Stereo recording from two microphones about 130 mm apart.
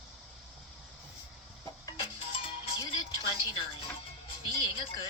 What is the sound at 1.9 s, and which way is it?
Music, 45° left (ahead or behind).